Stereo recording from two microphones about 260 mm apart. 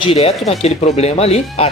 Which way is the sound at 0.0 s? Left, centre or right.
Left.